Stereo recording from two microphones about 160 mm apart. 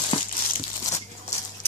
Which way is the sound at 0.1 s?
35° left (ahead or behind).